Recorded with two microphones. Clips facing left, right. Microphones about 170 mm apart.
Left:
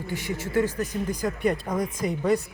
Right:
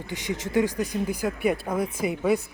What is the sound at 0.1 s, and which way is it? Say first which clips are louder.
Speech: right 1 dB; 20° right (ahead or behind).